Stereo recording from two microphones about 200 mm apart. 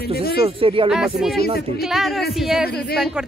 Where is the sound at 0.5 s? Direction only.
25° right (ahead or behind).